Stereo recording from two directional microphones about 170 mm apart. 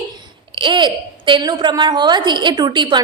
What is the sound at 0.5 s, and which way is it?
A woman's voice, 30° right (ahead or behind).